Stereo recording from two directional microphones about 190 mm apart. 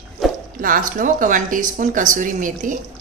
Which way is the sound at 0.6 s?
45° right (ahead or behind).